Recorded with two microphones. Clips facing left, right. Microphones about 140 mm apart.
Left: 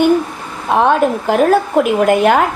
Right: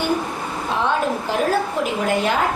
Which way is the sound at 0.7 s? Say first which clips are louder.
Left 9 dB; 60° left (ahead or behind).